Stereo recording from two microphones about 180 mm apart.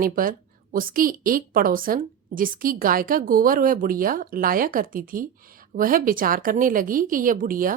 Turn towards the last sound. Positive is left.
turn(degrees=-50)  # may be behind; listen again after turning